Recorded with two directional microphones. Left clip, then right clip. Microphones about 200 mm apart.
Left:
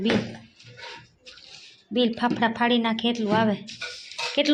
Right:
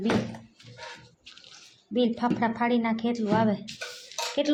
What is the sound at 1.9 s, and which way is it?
A woman's voice, 5° right (ahead or behind).